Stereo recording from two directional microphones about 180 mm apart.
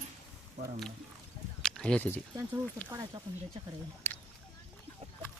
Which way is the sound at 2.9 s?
20° right (ahead or behind).